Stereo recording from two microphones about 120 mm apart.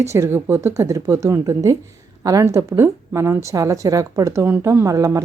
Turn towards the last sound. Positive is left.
turn(degrees=-25)  # may be behind; listen again after turning